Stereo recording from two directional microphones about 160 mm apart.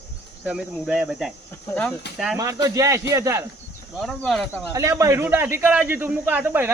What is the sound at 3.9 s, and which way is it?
Speech, centre (ahead or behind).